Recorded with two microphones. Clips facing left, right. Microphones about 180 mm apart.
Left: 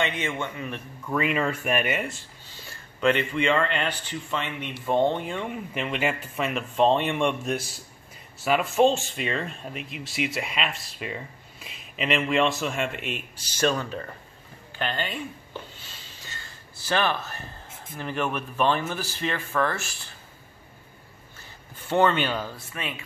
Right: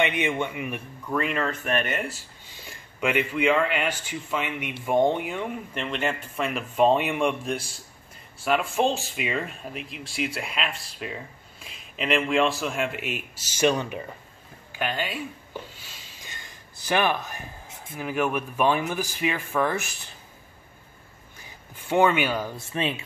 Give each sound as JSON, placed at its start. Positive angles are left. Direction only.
{"t": 0.0, "sound": "speech", "side_deg": -15}
{"t": 1.0, "sound": "speech", "side_deg": 5}
{"t": 3.0, "sound": "speech", "side_deg": -10}
{"t": 13.7, "sound": "speech", "side_deg": -15}
{"t": 16.2, "sound": "a sound", "side_deg": -15}
{"t": 17.9, "sound": "speech", "side_deg": -10}
{"t": 21.4, "sound": "speech", "side_deg": -10}
{"t": 22.7, "sound": "speech", "side_deg": -25}